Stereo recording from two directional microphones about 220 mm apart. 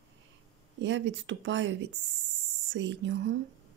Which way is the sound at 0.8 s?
55° right (ahead or behind).